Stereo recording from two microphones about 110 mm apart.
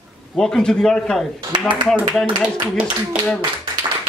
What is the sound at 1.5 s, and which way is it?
Speech, 45° right (ahead or behind).